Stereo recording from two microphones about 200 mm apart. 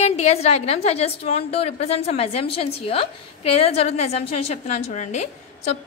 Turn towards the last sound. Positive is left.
turn(degrees=35)  # may be behind; listen again after turning